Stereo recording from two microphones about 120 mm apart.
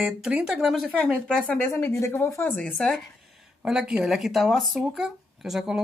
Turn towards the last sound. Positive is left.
turn(degrees=-5)  # may be behind; listen again after turning